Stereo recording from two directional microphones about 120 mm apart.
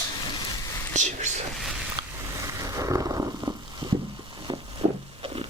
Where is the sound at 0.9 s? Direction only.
85° right.